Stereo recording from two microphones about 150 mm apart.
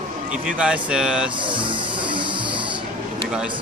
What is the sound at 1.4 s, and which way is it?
Music, 35° right (ahead or behind).